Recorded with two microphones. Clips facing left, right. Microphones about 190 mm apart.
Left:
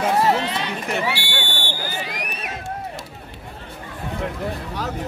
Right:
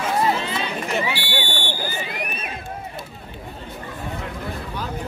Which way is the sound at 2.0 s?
75° left (ahead or behind).